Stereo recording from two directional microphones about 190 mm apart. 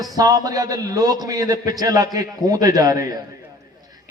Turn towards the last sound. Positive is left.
turn(degrees=-20)  # may be behind; listen again after turning